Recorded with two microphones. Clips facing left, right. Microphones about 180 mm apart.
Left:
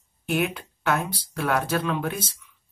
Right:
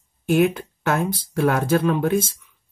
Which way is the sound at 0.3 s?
45° right (ahead or behind).